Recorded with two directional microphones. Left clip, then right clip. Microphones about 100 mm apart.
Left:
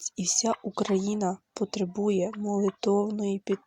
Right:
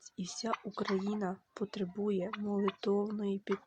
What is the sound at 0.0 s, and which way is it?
Speech, 80° left.